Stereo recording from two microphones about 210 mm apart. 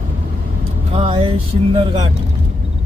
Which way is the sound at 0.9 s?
25° right (ahead or behind).